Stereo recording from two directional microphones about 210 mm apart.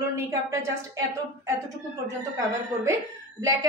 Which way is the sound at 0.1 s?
15° right (ahead or behind).